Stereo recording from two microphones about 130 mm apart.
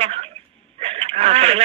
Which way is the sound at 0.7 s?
50° right (ahead or behind).